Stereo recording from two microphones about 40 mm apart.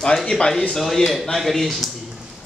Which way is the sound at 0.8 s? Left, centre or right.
Centre.